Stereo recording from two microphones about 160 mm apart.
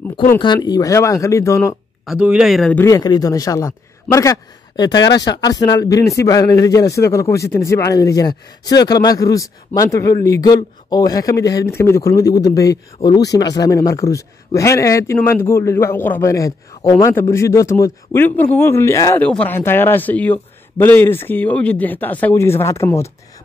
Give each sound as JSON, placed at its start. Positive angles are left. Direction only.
{"t": 0.6, "sound": "speech", "side_deg": 20}
{"t": 2.0, "sound": "speech", "side_deg": -5}
{"t": 2.8, "sound": "a man's voice", "side_deg": 20}